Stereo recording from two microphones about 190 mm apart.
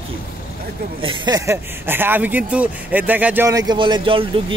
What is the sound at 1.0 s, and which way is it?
Speech, 25° right (ahead or behind).